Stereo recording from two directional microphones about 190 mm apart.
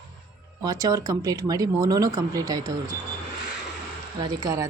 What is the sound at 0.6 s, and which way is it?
Speech, 20° right (ahead or behind).